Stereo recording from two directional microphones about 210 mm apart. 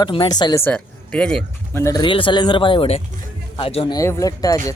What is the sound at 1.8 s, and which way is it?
Speech, 20° left (ahead or behind).